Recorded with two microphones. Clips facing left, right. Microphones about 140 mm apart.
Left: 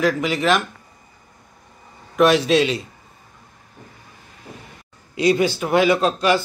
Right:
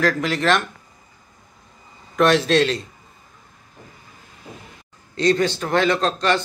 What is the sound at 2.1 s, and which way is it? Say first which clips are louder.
Speech: left 1 dB; 5° left (ahead or behind).